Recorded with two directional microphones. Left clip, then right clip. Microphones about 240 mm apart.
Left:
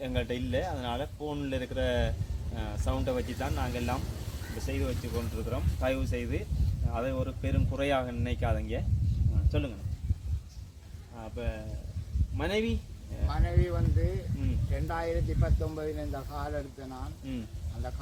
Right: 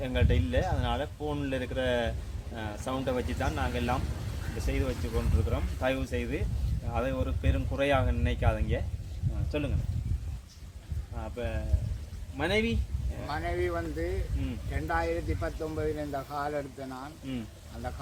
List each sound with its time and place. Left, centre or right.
0.0 s a man's voice: centre
11.2 s speech: centre
13.2 s speech: centre
14.8 s speech: centre